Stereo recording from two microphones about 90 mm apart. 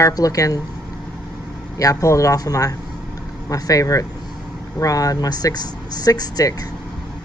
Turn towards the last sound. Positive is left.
turn(degrees=40)  # may be behind; listen again after turning